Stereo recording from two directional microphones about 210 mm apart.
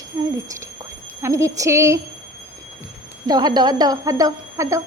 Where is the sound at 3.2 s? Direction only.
20° right (ahead or behind).